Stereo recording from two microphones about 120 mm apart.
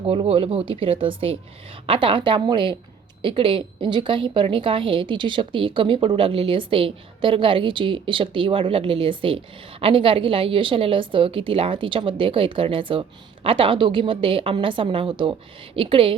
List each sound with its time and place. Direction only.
0.0 s a woman's voice: 50° right (ahead or behind)